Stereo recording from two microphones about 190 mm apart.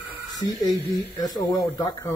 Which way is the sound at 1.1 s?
20° left (ahead or behind).